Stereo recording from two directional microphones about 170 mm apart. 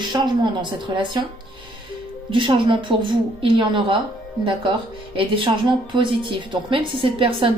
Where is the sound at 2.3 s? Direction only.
30° right (ahead or behind).